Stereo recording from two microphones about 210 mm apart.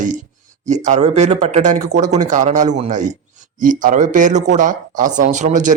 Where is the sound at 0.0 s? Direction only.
40° right (ahead or behind).